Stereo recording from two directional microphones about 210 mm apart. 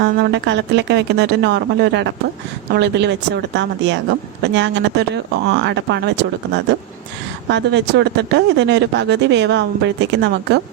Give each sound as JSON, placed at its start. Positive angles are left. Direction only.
{"t": 0.0, "sound": "speech", "side_deg": -55}
{"t": 7.5, "sound": "speech", "side_deg": -55}